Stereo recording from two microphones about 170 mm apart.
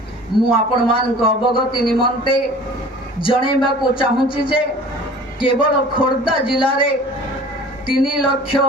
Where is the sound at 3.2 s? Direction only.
30° left (ahead or behind).